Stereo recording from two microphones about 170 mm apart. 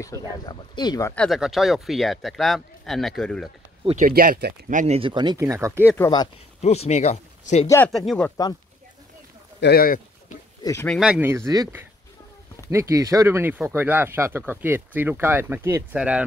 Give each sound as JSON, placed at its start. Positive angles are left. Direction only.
{"t": 0.0, "sound": "speech", "side_deg": 20}
{"t": 1.1, "sound": "speech", "side_deg": 0}
{"t": 3.8, "sound": "speech", "side_deg": -45}
{"t": 4.1, "sound": "speech", "side_deg": -60}
{"t": 4.7, "sound": "speech", "side_deg": -40}
{"t": 6.6, "sound": "speech", "side_deg": 40}
{"t": 7.6, "sound": "speech", "side_deg": 15}
{"t": 7.9, "sound": "speech", "side_deg": 0}
{"t": 9.6, "sound": "speech", "side_deg": 65}
{"t": 10.6, "sound": "speech", "side_deg": 20}
{"t": 10.9, "sound": "speech", "side_deg": -5}